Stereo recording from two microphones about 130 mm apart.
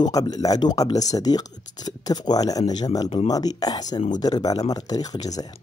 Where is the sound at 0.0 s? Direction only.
30° left (ahead or behind).